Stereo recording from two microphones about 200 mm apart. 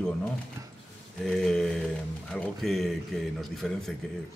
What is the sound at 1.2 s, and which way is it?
Speech, centre (ahead or behind).